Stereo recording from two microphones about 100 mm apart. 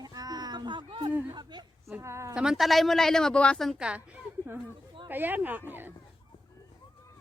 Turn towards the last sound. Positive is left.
turn(degrees=-20)  # may be behind; listen again after turning